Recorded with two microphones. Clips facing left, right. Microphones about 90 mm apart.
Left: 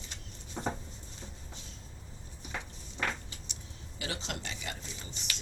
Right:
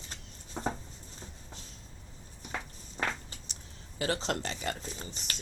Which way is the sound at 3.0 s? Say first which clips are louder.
Right 1 dB; 30° right (ahead or behind).